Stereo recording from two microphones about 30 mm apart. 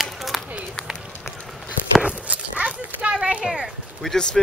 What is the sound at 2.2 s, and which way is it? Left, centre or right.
Dog, right.